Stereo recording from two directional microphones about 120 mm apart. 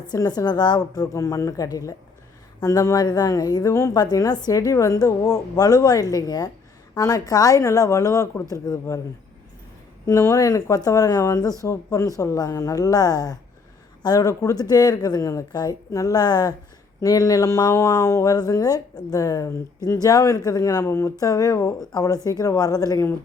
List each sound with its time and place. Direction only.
0.1 s speech: 35° left (ahead or behind)
10.1 s speech: 25° left (ahead or behind)